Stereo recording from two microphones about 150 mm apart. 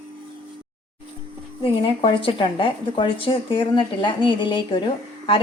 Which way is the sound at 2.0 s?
35° left (ahead or behind).